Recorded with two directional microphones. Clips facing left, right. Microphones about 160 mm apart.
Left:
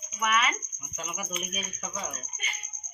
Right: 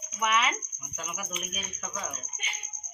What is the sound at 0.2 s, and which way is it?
Speech, 20° right (ahead or behind).